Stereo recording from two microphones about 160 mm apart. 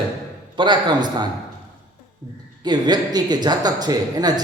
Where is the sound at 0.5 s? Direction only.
30° right (ahead or behind).